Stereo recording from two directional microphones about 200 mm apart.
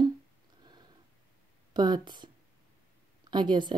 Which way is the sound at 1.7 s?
20° right (ahead or behind).